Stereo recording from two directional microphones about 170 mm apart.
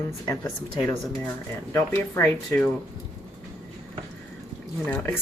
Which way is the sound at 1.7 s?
15° left (ahead or behind).